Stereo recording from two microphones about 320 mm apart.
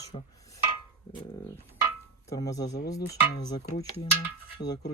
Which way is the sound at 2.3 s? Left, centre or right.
Centre.